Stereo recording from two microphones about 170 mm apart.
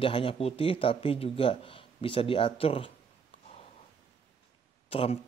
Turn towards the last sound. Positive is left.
turn(degrees=35)  # may be behind; listen again after turning